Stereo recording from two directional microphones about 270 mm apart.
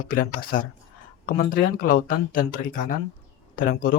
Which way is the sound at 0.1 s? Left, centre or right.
Left.